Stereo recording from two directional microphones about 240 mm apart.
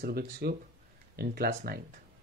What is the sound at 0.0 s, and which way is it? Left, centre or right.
Speech, right.